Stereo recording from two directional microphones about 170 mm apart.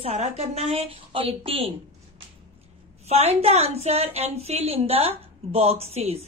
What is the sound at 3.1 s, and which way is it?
A woman's voice, 35° right (ahead or behind).